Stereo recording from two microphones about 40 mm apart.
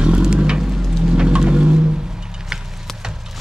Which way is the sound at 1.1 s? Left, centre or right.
Right.